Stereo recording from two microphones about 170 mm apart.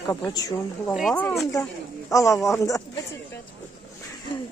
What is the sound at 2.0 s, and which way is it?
Speech, 20° left (ahead or behind).